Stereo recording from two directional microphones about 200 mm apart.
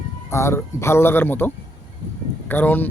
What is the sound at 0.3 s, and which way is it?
Speech, 15° left (ahead or behind).